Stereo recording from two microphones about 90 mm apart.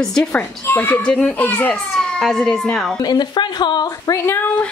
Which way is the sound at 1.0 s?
5° left (ahead or behind).